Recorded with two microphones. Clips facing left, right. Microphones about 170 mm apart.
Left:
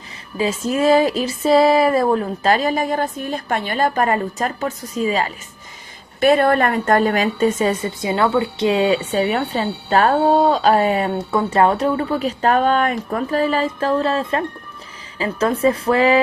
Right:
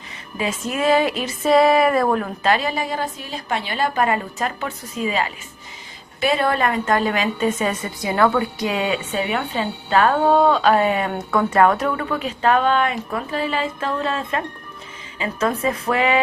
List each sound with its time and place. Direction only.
0.3 s speech: 35° left (ahead or behind)
6.1 s speech: 50° left (ahead or behind); by 11.1 s 35° left (ahead or behind)
11.3 s speech: 25° left (ahead or behind)